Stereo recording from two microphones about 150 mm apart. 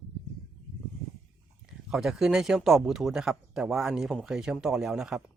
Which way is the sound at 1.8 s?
5° right (ahead or behind).